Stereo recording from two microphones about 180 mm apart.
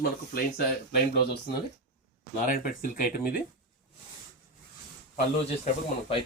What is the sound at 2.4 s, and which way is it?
Speech, 50° left (ahead or behind).